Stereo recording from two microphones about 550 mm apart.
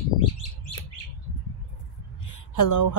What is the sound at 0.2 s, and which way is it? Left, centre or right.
Bird, left.